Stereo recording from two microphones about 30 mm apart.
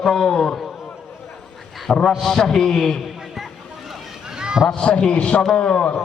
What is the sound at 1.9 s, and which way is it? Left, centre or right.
A man's voice, left.